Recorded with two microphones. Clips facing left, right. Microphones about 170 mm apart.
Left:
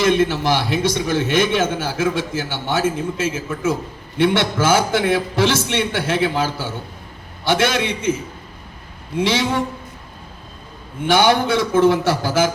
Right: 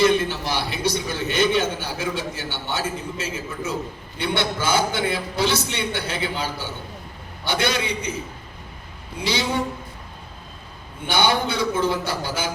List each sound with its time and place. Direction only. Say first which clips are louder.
0.0 s a man's voice: left 3 dB; 90° left
9.1 s a man's voice: left 7 dB; 90° left
11.0 s a man's voice: left 6 dB; 90° left